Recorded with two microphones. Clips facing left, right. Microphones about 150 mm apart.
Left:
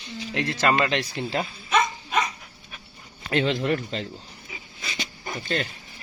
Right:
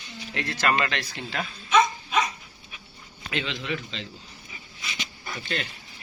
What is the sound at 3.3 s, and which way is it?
Speech, 40° left (ahead or behind).